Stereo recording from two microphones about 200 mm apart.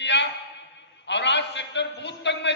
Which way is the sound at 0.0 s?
60° left (ahead or behind).